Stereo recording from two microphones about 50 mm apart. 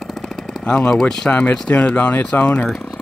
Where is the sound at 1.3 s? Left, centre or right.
Left.